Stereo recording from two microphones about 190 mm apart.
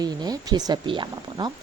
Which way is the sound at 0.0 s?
20° right (ahead or behind).